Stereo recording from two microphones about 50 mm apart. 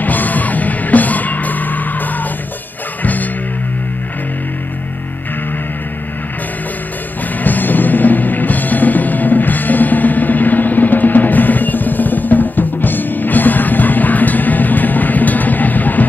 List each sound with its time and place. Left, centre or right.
0.0 s music: left
3.0 s music: left
7.4 s music: left